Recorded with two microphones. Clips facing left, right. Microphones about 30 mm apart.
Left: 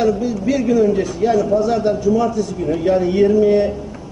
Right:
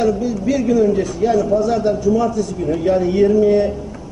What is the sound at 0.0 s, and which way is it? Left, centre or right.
A man's voice, centre.